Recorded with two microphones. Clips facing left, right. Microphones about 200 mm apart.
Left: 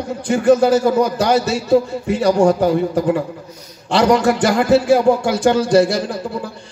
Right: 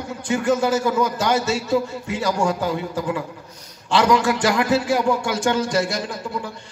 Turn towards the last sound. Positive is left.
turn(degrees=35)  # may be behind; listen again after turning